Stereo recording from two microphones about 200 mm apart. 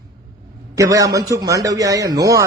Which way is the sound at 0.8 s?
15° right (ahead or behind).